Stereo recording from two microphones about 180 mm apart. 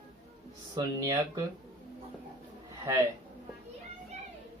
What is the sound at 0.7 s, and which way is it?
Speech, 20° right (ahead or behind).